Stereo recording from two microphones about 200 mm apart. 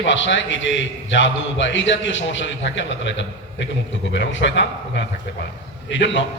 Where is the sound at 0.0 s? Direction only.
65° left (ahead or behind).